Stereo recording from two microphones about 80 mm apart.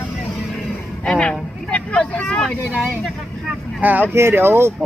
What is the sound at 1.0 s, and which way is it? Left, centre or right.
Vehicle, centre.